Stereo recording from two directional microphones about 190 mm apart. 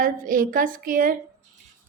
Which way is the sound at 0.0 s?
45° right (ahead or behind).